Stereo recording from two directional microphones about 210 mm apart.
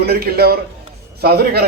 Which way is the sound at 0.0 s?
50° right (ahead or behind).